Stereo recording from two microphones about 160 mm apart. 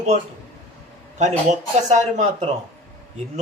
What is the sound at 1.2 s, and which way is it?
Speech, 45° right (ahead or behind).